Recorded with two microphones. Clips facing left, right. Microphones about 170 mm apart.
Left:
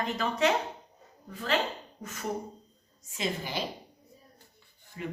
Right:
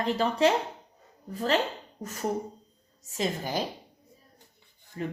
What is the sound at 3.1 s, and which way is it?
Speech, 40° right (ahead or behind).